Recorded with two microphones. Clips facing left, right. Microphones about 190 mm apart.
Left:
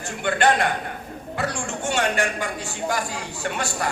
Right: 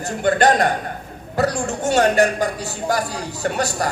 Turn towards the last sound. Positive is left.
turn(degrees=-40)  # may be behind; listen again after turning